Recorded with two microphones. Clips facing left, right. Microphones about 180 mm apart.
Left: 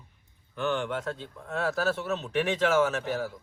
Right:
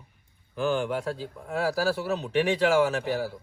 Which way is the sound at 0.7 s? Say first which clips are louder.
Right 3 dB; 35° right (ahead or behind).